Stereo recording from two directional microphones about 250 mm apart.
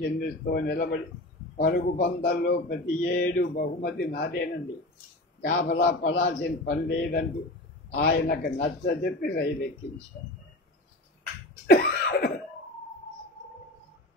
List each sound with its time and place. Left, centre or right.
0.0 s a man's voice: left
11.6 s cough: left